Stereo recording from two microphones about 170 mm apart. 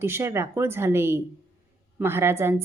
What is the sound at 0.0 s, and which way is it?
A woman's voice, 15° right (ahead or behind).